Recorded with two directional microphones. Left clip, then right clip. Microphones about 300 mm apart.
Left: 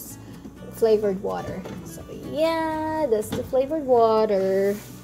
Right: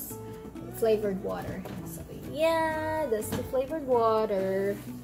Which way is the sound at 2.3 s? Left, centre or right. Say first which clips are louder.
Left 3 dB; centre.